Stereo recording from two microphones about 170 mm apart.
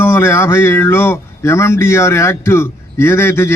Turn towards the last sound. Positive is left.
turn(degrees=15)  # may be behind; listen again after turning